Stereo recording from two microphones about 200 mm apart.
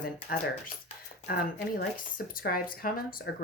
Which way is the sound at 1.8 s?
45° left (ahead or behind).